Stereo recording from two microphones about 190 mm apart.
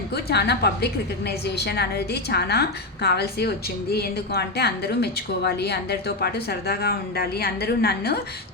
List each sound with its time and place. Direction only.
0.1 s a woman's voice: 60° left (ahead or behind)